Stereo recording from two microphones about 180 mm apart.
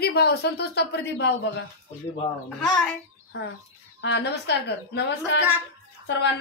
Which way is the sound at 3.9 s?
75° left (ahead or behind).